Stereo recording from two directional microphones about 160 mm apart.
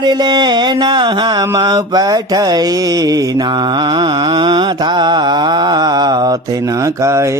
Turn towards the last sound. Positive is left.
turn(degrees=-20)  # may be behind; listen again after turning